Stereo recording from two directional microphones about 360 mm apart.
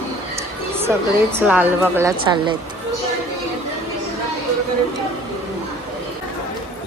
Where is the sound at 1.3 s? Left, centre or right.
Centre.